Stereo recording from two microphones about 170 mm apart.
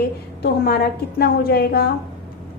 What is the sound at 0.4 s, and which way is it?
A woman's voice, 65° left (ahead or behind).